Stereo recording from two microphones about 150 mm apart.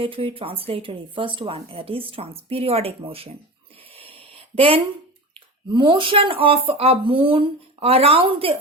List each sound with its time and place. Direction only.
0.0 s speech: 35° right (ahead or behind)
3.8 s a sound: 40° right (ahead or behind)
5.6 s speech: 30° right (ahead or behind)